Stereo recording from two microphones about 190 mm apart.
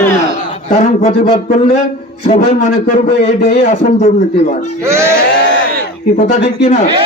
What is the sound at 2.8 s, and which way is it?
Speech, 40° left (ahead or behind).